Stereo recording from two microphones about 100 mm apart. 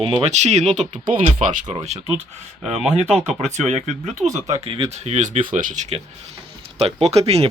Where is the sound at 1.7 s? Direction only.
80° right.